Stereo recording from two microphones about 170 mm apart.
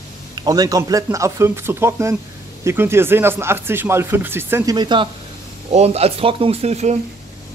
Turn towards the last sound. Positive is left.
turn(degrees=-40)  # may be behind; listen again after turning